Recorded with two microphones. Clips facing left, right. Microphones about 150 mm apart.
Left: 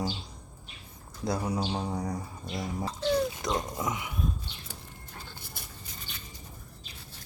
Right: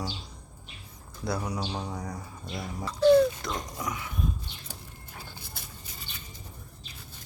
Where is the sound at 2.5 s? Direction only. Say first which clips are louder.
Left 2 dB; 15° left (ahead or behind).